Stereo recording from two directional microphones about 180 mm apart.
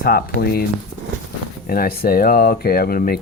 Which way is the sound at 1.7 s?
55° left (ahead or behind).